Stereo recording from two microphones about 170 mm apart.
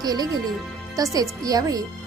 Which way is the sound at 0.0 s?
20° right (ahead or behind).